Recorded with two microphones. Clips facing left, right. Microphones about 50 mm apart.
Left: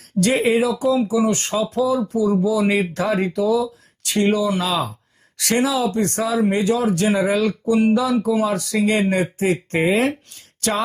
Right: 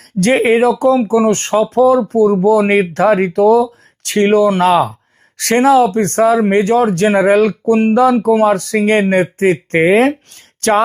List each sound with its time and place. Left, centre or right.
0.2 s speech: right